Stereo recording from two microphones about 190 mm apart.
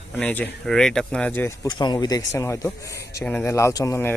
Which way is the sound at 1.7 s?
20° left (ahead or behind).